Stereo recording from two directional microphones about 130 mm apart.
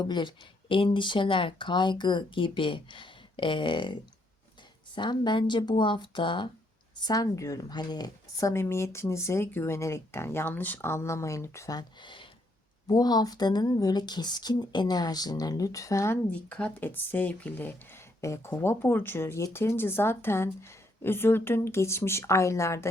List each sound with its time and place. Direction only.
0.0 s speech: 35° left (ahead or behind)
4.9 s speech: 35° left (ahead or behind)
16.3 s speech: 10° left (ahead or behind)